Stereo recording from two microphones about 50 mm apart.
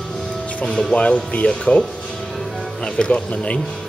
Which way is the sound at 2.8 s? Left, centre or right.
Centre.